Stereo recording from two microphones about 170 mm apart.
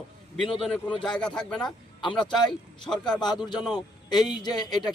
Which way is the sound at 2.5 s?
5° left (ahead or behind).